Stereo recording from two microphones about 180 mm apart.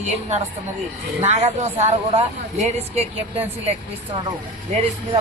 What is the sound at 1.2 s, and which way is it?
Speech, 35° right (ahead or behind).